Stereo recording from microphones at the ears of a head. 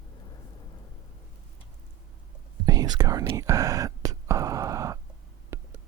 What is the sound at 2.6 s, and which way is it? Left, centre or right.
Whispering, right.